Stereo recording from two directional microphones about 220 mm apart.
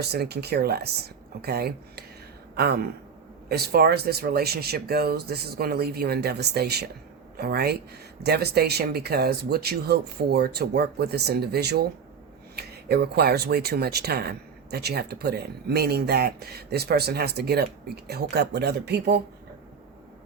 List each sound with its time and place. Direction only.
0.0 s speech: 45° right (ahead or behind)